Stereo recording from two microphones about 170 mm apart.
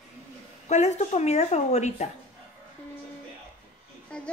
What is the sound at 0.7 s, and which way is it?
Speech, 40° left (ahead or behind).